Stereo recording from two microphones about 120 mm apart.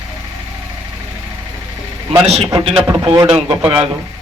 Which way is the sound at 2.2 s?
60° right (ahead or behind).